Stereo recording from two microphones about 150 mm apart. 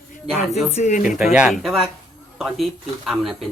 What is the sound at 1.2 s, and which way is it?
Speech, 5° right (ahead or behind).